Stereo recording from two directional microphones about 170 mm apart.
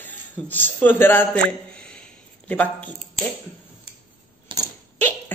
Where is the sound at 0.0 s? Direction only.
10° left (ahead or behind).